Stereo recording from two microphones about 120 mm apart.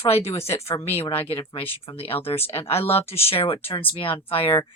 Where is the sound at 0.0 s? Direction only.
55° left (ahead or behind).